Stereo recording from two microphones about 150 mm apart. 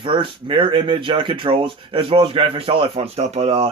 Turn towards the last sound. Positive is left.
turn(degrees=-40)  # may be behind; listen again after turning